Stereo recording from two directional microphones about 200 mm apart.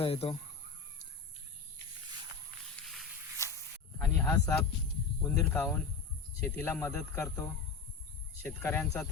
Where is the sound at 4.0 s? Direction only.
10° left (ahead or behind).